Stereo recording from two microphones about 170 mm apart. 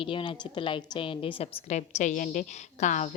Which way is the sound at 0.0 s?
30° left (ahead or behind).